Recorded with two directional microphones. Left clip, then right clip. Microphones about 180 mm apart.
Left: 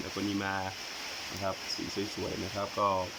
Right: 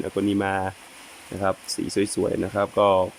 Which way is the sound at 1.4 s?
60° right (ahead or behind).